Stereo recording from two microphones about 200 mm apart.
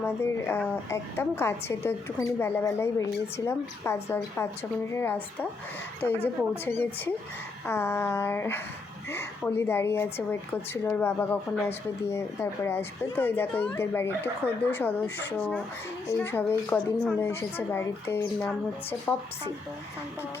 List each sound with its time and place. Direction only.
0.0 s a woman's voice: 10° left (ahead or behind)